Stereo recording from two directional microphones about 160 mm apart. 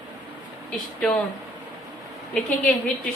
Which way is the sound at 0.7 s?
10° left (ahead or behind).